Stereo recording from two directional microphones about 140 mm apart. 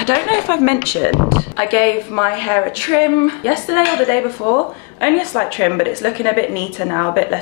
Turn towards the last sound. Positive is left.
turn(degrees=25)  # may be behind; listen again after turning